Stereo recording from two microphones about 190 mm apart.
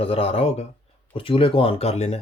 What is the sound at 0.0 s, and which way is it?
Speech, 30° left (ahead or behind).